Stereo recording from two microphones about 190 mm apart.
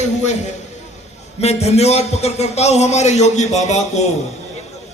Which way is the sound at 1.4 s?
35° left (ahead or behind).